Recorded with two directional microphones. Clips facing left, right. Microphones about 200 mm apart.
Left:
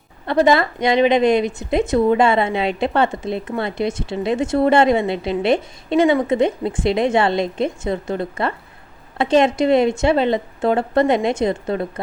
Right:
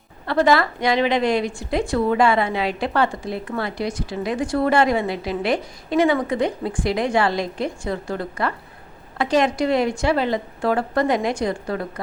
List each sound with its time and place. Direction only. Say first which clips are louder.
0.3 s a woman's voice: left 2 dB; 20° left (ahead or behind)